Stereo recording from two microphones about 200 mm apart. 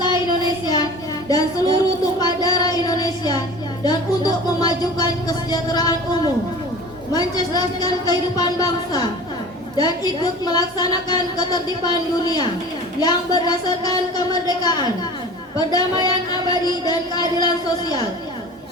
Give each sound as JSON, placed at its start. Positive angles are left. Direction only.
{"t": 0.6, "sound": "child singing", "side_deg": 20}
{"t": 3.8, "sound": "music", "side_deg": 20}
{"t": 5.5, "sound": "a woman's voice", "side_deg": 20}
{"t": 7.1, "sound": "a woman's voice", "side_deg": 20}